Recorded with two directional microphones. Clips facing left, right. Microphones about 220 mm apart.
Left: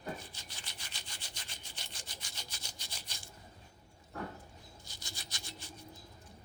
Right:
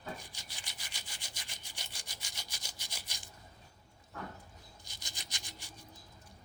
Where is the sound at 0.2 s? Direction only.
15° right (ahead or behind).